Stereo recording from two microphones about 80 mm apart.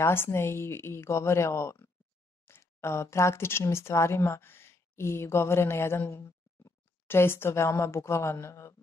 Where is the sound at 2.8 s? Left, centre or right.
Left.